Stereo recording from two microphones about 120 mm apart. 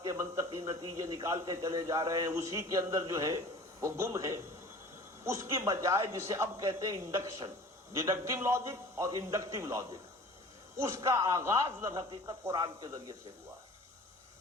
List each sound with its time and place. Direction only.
0.0 s a man's voice: 25° right (ahead or behind)